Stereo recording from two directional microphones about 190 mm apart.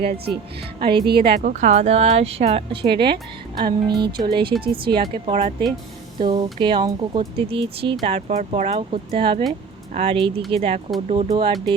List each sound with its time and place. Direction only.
0.8 s speech: 25° right (ahead or behind)
1.0 s a woman's voice: 55° right (ahead or behind)
1.4 s speech: 40° right (ahead or behind)